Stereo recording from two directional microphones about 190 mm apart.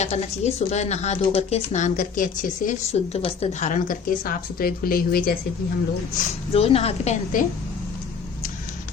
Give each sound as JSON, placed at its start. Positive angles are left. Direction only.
{"t": 0.0, "sound": "speech", "side_deg": 35}
{"t": 2.9, "sound": "a woman's voice", "side_deg": 30}
{"t": 6.5, "sound": "speech", "side_deg": 30}